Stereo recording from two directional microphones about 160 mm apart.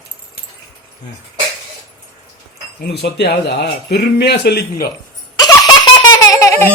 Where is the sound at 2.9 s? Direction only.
90° left.